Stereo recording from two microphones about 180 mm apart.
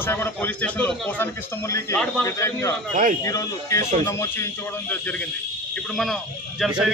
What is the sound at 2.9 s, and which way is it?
Speech, 45° right (ahead or behind).